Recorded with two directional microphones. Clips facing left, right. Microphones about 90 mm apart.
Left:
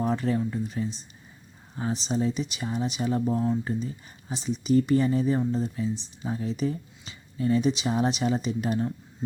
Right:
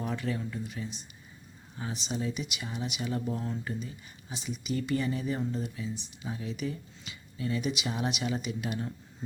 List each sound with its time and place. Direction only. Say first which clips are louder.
0.0 s speech: left 8 dB; 35° left (ahead or behind)